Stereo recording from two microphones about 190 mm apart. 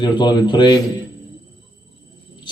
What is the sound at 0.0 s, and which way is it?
Speech, 25° left (ahead or behind).